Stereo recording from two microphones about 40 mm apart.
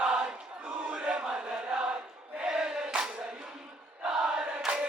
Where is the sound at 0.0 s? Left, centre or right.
Right.